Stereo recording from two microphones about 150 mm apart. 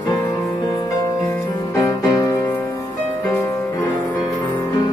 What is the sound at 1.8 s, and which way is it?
Music, 20° left (ahead or behind).